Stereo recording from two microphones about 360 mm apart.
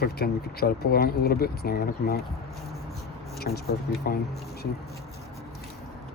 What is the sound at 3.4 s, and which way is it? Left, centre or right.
Speech, left.